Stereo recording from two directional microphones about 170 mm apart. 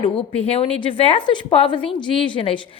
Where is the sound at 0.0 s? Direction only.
35° left (ahead or behind).